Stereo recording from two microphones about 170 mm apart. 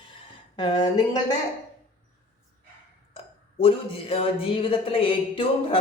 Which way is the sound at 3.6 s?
35° left (ahead or behind).